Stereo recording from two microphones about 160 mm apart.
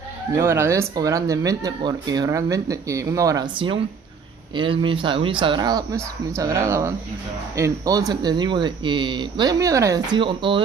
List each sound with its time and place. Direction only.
0.4 s speech: 15° right (ahead or behind)
3.5 s speech: 30° right (ahead or behind)